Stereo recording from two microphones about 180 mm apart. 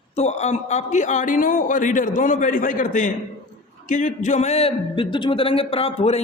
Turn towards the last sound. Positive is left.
turn(degrees=35)  # may be behind; listen again after turning